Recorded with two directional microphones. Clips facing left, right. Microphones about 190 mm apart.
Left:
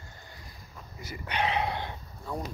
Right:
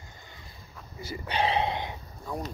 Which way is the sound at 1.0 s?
30° right (ahead or behind).